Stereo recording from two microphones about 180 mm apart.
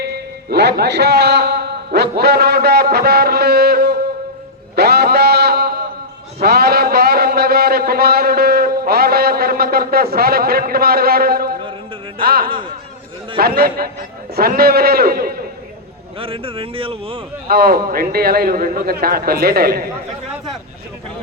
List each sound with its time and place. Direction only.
0.0 s a man's voice: 65° right (ahead or behind)
4.7 s music: 65° right (ahead or behind)
6.4 s a sound: 60° right (ahead or behind)
12.2 s a man's voice: 55° right (ahead or behind)
16.1 s speech: 30° right (ahead or behind)
17.5 s a man's voice: 55° right (ahead or behind)